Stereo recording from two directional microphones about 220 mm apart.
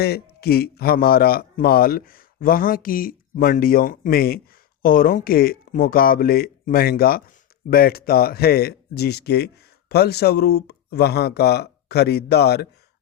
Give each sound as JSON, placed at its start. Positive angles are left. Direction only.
{"t": 0.0, "sound": "speech", "side_deg": 45}